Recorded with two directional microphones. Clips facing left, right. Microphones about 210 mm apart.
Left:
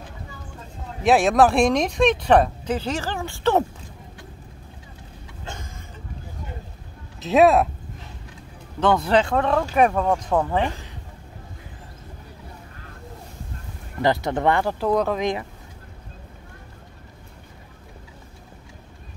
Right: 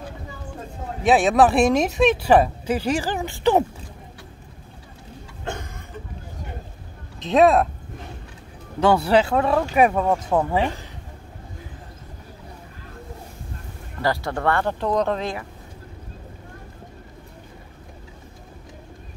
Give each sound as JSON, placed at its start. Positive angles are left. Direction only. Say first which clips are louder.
{"t": 1.0, "sound": "speech", "louder": "even", "side_deg": 0}
{"t": 5.4, "sound": "a sound", "louder": "right 6 dB", "side_deg": -60}
{"t": 7.2, "sound": "speech", "louder": "even", "side_deg": 5}
{"t": 8.7, "sound": "speech", "louder": "right 2 dB", "side_deg": -10}
{"t": 14.0, "sound": "speech", "louder": "left 2 dB", "side_deg": 20}
{"t": 14.7, "sound": "speech", "louder": "left 1 dB", "side_deg": 5}